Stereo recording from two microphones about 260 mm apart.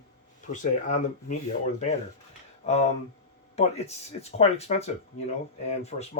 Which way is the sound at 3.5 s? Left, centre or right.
Left.